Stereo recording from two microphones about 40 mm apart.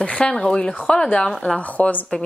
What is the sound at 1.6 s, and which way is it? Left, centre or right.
Speech, left.